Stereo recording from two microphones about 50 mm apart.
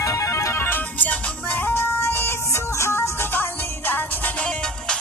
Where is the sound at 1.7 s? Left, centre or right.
Left.